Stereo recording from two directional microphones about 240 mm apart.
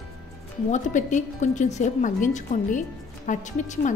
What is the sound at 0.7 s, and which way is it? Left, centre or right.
Speech, left.